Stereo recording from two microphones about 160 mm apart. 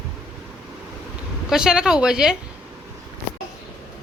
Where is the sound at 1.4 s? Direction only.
5° right (ahead or behind).